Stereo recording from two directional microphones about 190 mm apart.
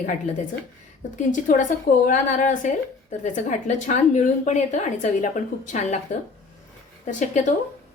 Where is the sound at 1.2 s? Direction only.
40° left (ahead or behind).